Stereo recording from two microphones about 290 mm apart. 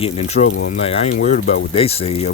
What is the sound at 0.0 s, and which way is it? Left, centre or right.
Speech, left.